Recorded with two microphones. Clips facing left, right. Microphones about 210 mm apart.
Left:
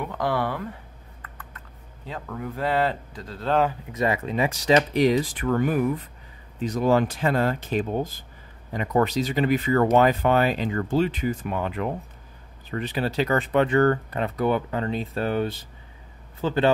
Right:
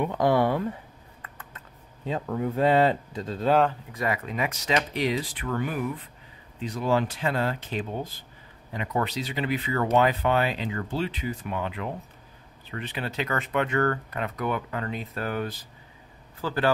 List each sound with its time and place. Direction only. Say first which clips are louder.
0.0 s speech: right 4 dB; 20° right (ahead or behind)
2.0 s speech: right 5 dB; 25° right (ahead or behind)
3.9 s speech: left 5 dB; 25° left (ahead or behind)